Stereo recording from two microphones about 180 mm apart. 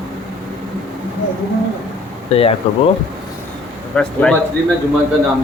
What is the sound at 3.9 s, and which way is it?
Speech, 5° left (ahead or behind).